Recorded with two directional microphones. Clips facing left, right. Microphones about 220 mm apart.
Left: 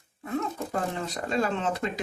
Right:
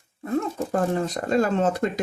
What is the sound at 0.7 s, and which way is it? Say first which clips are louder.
Speech: right 7 dB; 45° right (ahead or behind).